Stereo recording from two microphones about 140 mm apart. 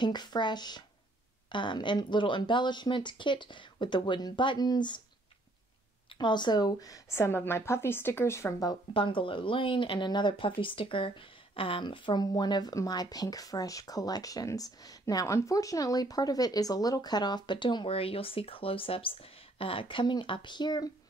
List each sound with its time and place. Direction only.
0.0 s speech: 30° left (ahead or behind)
6.1 s a woman's voice: 30° left (ahead or behind)